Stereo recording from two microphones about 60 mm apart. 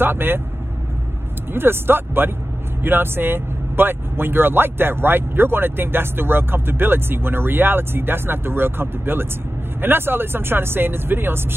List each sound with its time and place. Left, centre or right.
0.0 s speech: right
1.5 s speech: right